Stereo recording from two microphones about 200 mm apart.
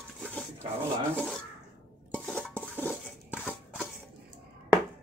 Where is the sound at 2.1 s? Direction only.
5° left (ahead or behind).